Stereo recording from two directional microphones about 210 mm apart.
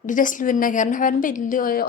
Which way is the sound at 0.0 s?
40° left (ahead or behind).